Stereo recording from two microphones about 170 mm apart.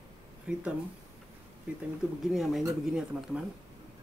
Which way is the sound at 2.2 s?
Centre (ahead or behind).